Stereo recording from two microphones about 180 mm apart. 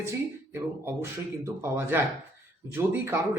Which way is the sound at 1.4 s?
15° right (ahead or behind).